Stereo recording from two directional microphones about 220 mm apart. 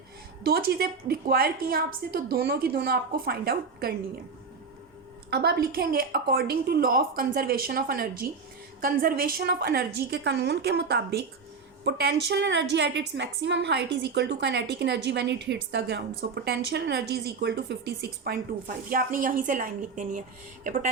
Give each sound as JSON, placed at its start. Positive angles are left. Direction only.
{"t": 0.4, "sound": "a woman's voice", "side_deg": -45}
{"t": 5.3, "sound": "a woman's voice", "side_deg": -50}